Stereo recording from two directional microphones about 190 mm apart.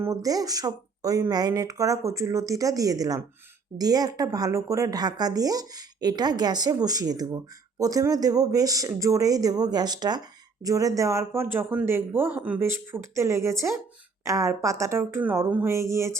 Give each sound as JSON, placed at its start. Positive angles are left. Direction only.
{"t": 0.0, "sound": "a woman's voice", "side_deg": -15}